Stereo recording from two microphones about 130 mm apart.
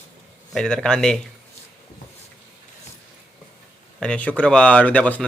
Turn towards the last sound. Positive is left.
turn(degrees=10)  # may be behind; listen again after turning